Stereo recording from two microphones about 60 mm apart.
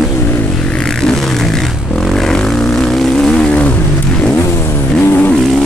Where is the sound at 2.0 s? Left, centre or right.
Centre.